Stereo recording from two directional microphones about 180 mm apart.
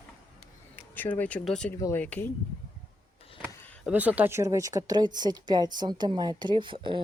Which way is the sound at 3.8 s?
10° right (ahead or behind).